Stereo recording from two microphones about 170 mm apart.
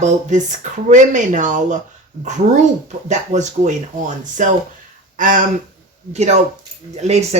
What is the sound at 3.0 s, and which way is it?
Speech, 45° right (ahead or behind).